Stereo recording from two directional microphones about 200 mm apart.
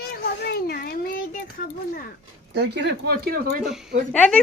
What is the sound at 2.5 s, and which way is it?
Speech, 55° right (ahead or behind).